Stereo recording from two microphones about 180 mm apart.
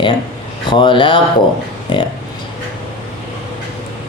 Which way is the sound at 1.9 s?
30° left (ahead or behind).